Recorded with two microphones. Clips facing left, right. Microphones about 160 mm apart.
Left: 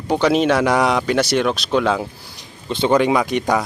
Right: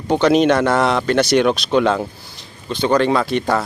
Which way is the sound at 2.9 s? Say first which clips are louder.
Even; 15° left (ahead or behind).